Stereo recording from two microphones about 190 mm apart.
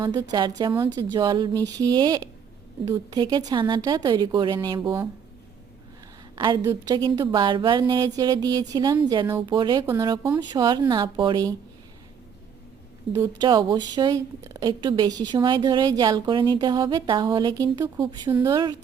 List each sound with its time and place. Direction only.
0.0 s a woman's voice: 20° right (ahead or behind)
6.3 s a woman's voice: 20° right (ahead or behind)
13.1 s a woman's voice: 20° right (ahead or behind)